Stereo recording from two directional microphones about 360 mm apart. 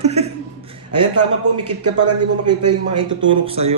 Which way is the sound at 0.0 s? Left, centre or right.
Centre.